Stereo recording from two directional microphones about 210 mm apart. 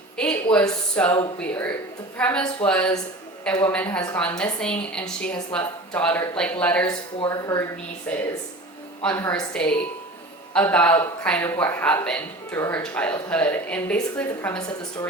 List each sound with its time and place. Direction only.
0.2 s a woman's voice: 5° left (ahead or behind)
6.8 s a woman's voice: 15° left (ahead or behind)